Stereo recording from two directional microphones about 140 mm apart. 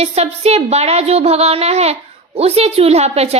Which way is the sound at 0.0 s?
50° right (ahead or behind).